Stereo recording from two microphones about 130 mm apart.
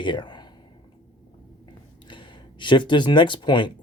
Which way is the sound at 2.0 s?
40° left (ahead or behind).